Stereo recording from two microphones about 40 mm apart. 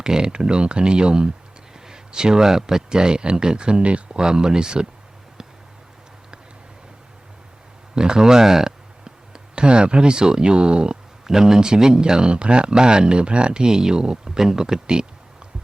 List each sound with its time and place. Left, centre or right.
0.0 s speech: centre
4.2 s speech: centre
7.9 s speech: centre
11.3 s speech: centre